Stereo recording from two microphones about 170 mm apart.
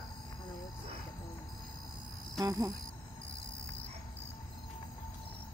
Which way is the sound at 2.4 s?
20° right (ahead or behind).